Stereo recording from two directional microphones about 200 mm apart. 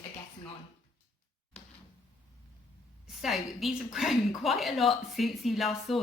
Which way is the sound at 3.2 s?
Centre (ahead or behind).